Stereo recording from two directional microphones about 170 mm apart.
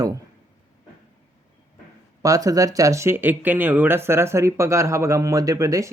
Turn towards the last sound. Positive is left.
turn(degrees=-20)  # may be behind; listen again after turning